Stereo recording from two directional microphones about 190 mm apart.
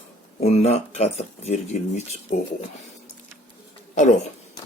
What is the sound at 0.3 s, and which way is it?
Speech, 35° left (ahead or behind).